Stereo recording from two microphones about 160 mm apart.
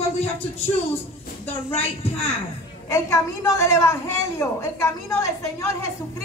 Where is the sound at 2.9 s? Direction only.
15° left (ahead or behind).